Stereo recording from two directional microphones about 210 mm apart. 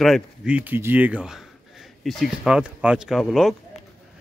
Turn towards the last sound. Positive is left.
turn(degrees=0)  # may be behind; listen again after turning